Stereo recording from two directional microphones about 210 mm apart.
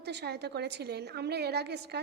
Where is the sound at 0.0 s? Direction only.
50° right (ahead or behind).